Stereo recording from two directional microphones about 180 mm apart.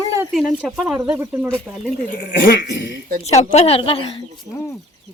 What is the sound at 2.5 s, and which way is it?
Speech, 80° left.